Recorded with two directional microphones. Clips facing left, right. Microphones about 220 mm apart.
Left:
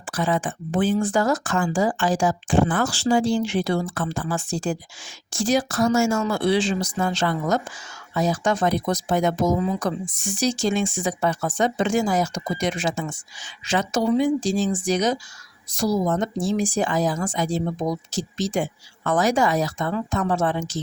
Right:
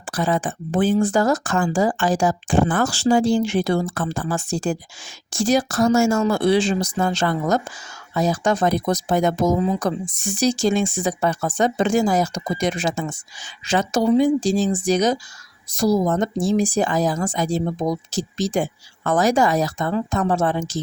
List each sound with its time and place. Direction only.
0.1 s speech: 35° right (ahead or behind)